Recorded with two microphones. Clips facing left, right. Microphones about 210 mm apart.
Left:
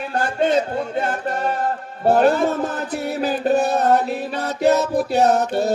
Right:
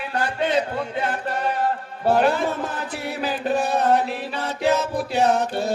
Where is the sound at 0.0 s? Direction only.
45° left (ahead or behind).